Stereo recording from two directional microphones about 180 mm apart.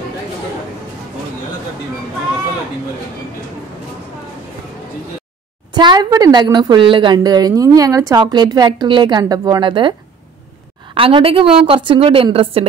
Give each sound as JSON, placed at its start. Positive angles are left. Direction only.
{"t": 5.7, "sound": "a woman's voice", "side_deg": -25}
{"t": 11.0, "sound": "a woman's voice", "side_deg": -30}